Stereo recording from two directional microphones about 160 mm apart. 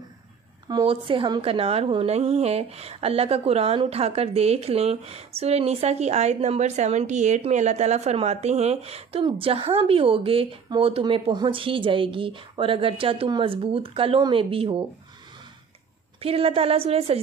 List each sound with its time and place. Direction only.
0.7 s a woman's voice: 30° right (ahead or behind)
16.2 s a woman's voice: 35° right (ahead or behind)